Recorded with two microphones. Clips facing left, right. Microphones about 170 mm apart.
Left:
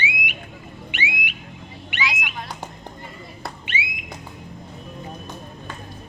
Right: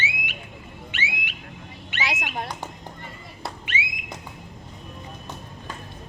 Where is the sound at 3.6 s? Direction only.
30° left (ahead or behind).